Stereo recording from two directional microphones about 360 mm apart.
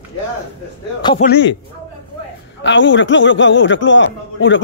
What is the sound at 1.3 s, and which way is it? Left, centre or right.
Speech, left.